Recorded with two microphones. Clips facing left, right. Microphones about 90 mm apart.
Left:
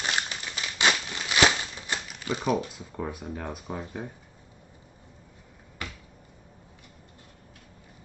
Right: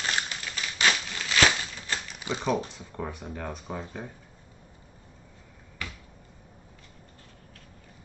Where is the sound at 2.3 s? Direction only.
20° right (ahead or behind).